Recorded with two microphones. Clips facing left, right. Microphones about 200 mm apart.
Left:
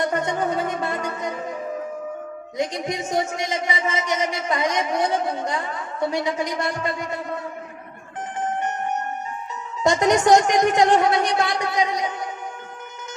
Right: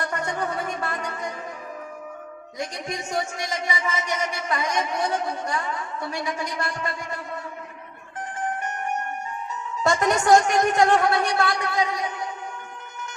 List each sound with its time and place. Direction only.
0.0 s music: 20° left (ahead or behind)
2.6 s speech: 20° left (ahead or behind)
9.8 s speech: 20° left (ahead or behind)